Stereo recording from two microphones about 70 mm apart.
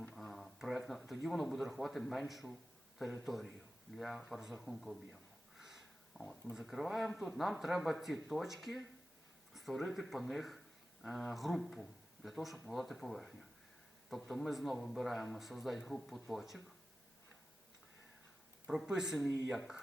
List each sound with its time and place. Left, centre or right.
0.1 s speech: centre
5.5 s a sound: centre
6.5 s speech: centre
18.9 s speech: centre